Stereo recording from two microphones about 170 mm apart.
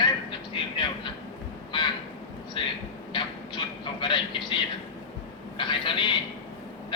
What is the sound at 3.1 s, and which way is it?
Vehicle, 30° left (ahead or behind).